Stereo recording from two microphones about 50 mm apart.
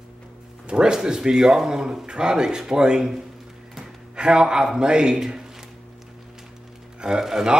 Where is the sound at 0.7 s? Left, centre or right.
Centre.